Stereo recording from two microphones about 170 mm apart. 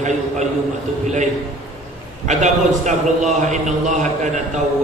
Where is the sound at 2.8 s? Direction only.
45° right (ahead or behind).